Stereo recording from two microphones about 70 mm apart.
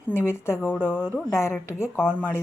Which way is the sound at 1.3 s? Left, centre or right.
Left.